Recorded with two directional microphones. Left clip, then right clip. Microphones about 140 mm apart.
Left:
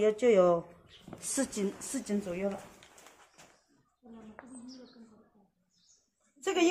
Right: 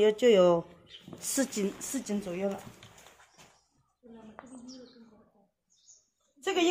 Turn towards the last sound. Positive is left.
turn(degrees=-20)  # may be behind; listen again after turning